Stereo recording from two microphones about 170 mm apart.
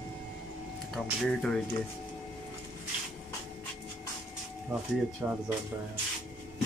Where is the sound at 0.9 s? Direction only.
5° left (ahead or behind).